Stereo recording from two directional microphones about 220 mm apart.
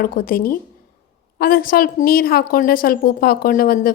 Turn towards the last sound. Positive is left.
turn(degrees=40)  # may be behind; listen again after turning